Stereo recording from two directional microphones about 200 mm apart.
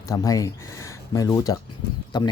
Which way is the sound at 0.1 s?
15° left (ahead or behind).